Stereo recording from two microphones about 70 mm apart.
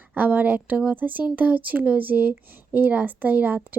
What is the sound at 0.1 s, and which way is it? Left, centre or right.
Speech, right.